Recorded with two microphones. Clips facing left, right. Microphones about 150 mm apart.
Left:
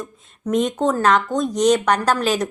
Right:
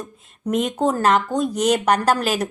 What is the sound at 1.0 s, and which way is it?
Speech, 10° right (ahead or behind).